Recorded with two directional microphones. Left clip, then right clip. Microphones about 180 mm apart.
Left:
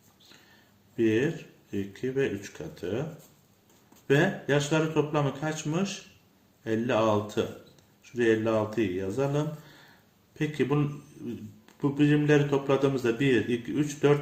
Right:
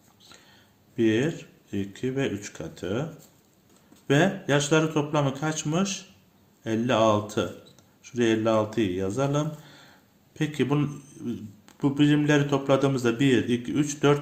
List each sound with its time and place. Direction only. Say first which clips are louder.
0.9 s a man's voice: right 2 dB; 35° right (ahead or behind)
4.1 s a man's voice: right 2 dB; 30° right (ahead or behind)